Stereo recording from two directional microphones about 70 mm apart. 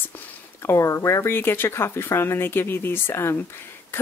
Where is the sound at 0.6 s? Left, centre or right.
Left.